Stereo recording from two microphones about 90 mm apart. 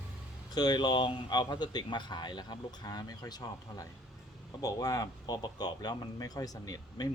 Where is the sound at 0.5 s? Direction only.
50° left (ahead or behind).